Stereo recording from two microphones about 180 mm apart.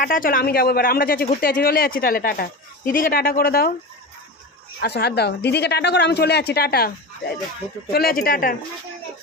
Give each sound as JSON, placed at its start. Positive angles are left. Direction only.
{"t": 0.0, "sound": "speech", "side_deg": 50}
{"t": 4.8, "sound": "speech", "side_deg": 65}
{"t": 7.9, "sound": "speech", "side_deg": 55}